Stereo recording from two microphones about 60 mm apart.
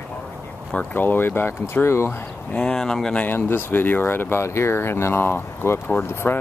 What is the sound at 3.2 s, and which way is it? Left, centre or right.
Speech, left.